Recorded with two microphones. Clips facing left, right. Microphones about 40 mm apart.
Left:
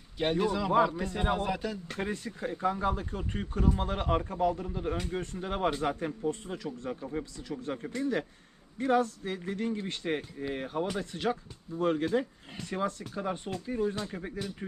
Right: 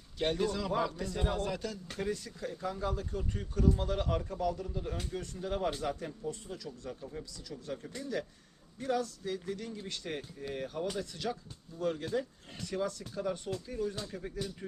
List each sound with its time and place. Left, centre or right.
0.2 s a man's voice: centre
2.0 s speech: left